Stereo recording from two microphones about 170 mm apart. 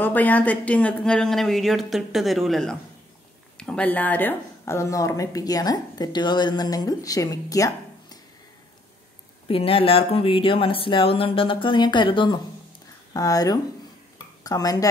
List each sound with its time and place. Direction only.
0.0 s speech: 10° left (ahead or behind)
9.5 s speech: 35° left (ahead or behind)